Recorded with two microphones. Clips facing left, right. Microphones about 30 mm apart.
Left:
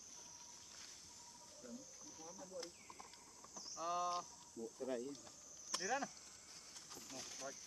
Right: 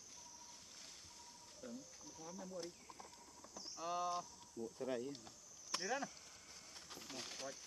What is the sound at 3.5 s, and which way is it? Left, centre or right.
Clip-clop, right.